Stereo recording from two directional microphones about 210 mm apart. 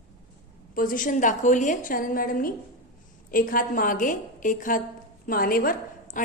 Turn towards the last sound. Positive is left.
turn(degrees=40)  # may be behind; listen again after turning